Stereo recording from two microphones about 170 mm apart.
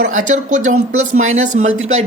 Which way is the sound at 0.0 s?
50° right (ahead or behind).